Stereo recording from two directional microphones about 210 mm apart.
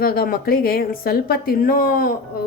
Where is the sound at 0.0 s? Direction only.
45° left (ahead or behind).